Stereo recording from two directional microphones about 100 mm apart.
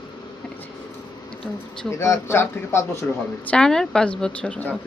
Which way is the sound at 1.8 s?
30° left (ahead or behind).